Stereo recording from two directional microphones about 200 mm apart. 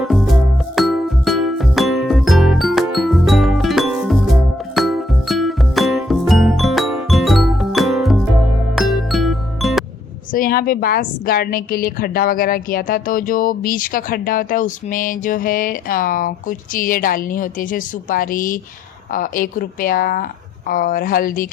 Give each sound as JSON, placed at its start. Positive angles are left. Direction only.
{"t": 0.0, "sound": "music", "side_deg": 0}
{"t": 10.3, "sound": "a woman's voice", "side_deg": 45}